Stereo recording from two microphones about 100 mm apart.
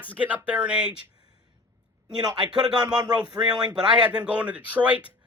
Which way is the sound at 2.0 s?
45° right (ahead or behind).